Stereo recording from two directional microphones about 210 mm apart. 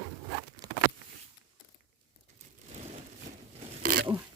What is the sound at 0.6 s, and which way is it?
Zipper, 20° right (ahead or behind).